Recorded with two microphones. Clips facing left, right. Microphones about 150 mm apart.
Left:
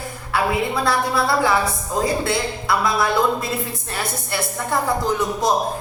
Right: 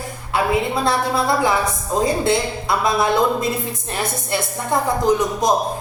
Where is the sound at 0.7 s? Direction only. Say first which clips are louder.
Right 1 dB; 20° right (ahead or behind).